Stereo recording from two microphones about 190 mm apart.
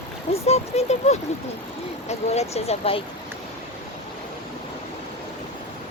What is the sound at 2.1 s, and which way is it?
Speech, 35° left (ahead or behind).